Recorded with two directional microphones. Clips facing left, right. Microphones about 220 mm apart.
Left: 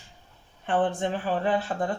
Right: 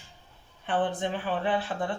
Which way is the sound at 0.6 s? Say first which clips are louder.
Left 3 dB; 45° left (ahead or behind).